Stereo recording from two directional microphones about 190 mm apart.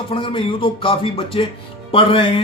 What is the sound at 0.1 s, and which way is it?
Speech, 30° left (ahead or behind).